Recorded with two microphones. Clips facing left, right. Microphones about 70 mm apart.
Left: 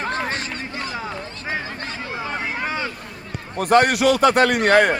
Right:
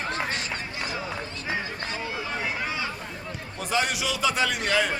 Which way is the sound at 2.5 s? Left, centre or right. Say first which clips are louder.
Left 5 dB; left.